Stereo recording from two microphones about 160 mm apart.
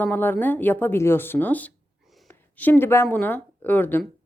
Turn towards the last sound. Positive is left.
turn(degrees=10)  # may be behind; listen again after turning